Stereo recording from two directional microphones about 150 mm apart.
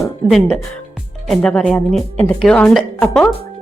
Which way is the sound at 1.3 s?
5° left (ahead or behind).